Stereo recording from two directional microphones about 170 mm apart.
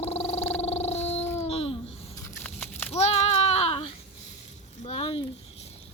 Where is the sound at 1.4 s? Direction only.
35° left (ahead or behind).